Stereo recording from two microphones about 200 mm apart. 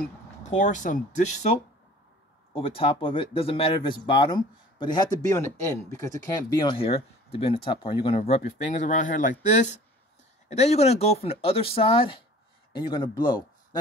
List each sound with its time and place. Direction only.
0.6 s speech: 40° left (ahead or behind)
2.5 s speech: 25° left (ahead or behind)